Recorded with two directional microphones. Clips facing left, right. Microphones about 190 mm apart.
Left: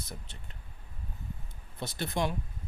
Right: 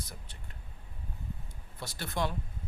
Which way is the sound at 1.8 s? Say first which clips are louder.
Left 2 dB; 20° left (ahead or behind).